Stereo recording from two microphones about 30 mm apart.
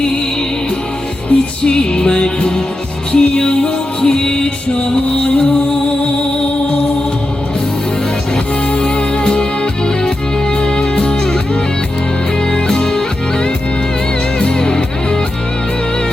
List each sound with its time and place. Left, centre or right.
1.3 s music: left
1.6 s music: left
8.7 s music: left
12.5 s music: left
14.3 s music: left